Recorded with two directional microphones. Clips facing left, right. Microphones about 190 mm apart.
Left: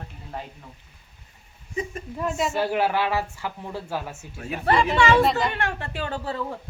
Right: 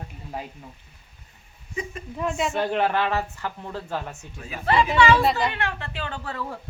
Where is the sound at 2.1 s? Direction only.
5° left (ahead or behind).